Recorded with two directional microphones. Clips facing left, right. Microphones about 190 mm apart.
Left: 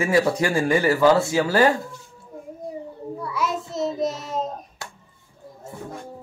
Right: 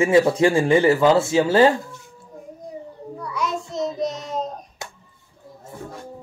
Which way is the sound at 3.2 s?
5° left (ahead or behind).